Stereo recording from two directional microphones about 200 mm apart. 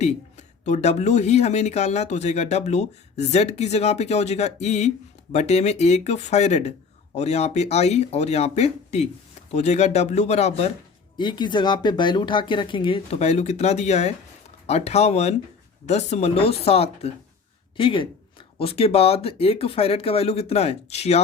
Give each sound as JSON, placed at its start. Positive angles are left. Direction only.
{"t": 0.0, "sound": "speech", "side_deg": 35}
{"t": 11.2, "sound": "speech", "side_deg": 20}